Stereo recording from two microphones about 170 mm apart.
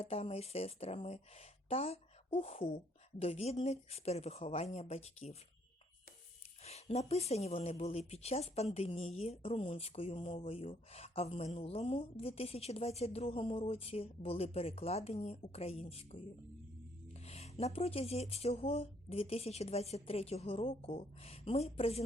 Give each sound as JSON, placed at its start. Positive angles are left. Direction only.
{"t": 0.0, "sound": "speech", "side_deg": 35}
{"t": 6.7, "sound": "speech", "side_deg": 40}
{"t": 17.2, "sound": "speech", "side_deg": 40}